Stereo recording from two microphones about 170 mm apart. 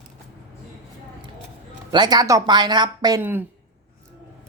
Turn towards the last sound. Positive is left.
turn(degrees=-10)  # may be behind; listen again after turning